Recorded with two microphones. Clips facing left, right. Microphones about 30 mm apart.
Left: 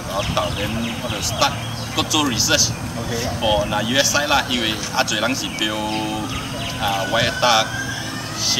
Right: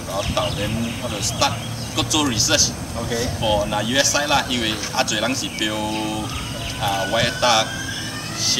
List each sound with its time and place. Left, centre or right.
0.1 s speech: centre